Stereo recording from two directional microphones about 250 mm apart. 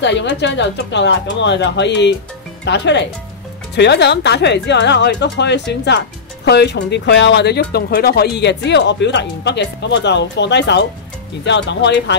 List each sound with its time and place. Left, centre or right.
0.0 s speech: left